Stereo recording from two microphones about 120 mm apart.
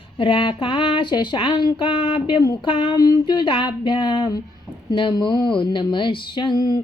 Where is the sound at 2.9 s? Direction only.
35° left (ahead or behind).